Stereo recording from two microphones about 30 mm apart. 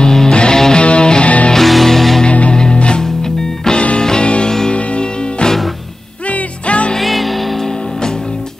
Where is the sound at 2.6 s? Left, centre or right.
Left.